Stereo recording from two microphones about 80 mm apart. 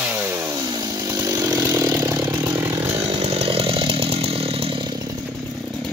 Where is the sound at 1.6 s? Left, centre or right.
Right.